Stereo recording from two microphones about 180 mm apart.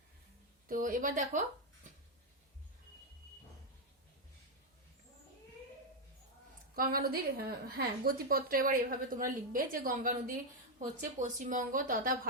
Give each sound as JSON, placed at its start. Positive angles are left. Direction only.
{"t": 0.7, "sound": "a woman's voice", "side_deg": -50}
{"t": 6.7, "sound": "a woman's voice", "side_deg": -55}